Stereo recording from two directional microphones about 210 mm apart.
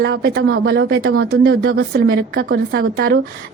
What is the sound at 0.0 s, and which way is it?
Speech, 50° right (ahead or behind).